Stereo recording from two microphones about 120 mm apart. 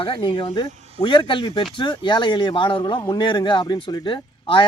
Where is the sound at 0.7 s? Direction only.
65° right (ahead or behind).